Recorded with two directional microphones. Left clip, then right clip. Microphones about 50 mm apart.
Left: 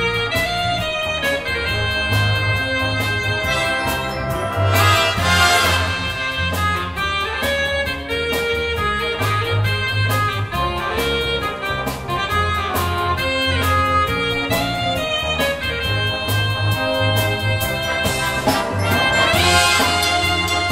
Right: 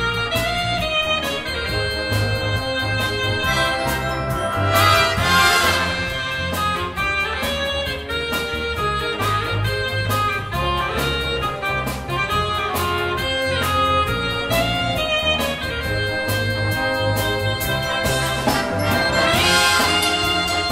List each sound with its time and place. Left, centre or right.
4.7 s music: centre
19.1 s music: left